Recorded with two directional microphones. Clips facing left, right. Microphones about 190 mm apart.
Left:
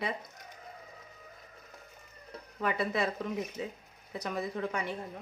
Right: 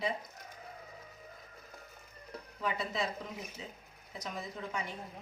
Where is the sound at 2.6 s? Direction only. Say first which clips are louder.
Left 5 dB; 60° left (ahead or behind).